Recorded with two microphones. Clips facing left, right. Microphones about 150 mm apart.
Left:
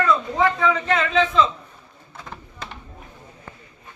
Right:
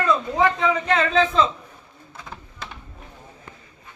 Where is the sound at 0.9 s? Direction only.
35° right (ahead or behind).